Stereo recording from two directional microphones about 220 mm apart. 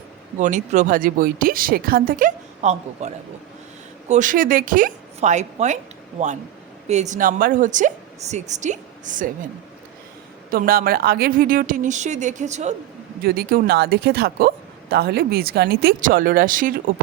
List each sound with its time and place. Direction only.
0.3 s a woman's voice: 35° right (ahead or behind)
4.1 s a woman's voice: 35° right (ahead or behind)
10.5 s a woman's voice: 40° right (ahead or behind)
13.2 s speech: 40° right (ahead or behind)